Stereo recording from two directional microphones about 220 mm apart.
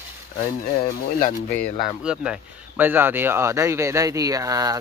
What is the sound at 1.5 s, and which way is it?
Speech, 5° left (ahead or behind).